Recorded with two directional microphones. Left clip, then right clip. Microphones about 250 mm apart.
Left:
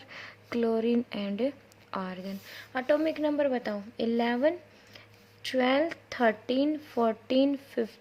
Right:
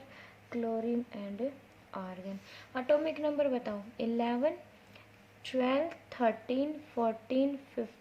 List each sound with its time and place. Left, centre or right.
0.1 s a woman's voice: left